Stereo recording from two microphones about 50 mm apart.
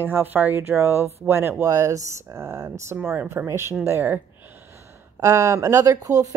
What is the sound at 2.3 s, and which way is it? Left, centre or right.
Speech, right.